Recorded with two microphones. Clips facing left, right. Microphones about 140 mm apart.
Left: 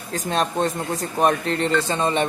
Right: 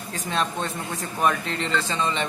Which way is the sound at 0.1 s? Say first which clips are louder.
Left 4 dB; 40° left (ahead or behind).